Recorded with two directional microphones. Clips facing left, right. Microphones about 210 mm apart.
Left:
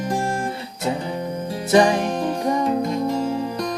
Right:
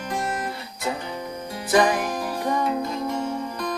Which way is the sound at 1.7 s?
25° left (ahead or behind).